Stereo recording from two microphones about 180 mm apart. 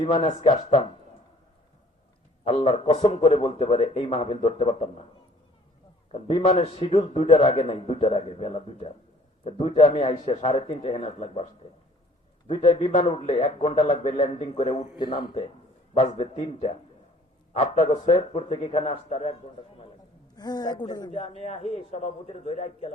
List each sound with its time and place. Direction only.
0.0 s a man's voice: 30° left (ahead or behind)
2.6 s a man's voice: 35° left (ahead or behind)
6.1 s a man's voice: 30° left (ahead or behind)
12.5 s a man's voice: 40° left (ahead or behind)
14.9 s speech: 25° left (ahead or behind)
16.0 s a man's voice: 35° left (ahead or behind)
20.3 s speech: 20° left (ahead or behind)
21.1 s a man's voice: 35° left (ahead or behind)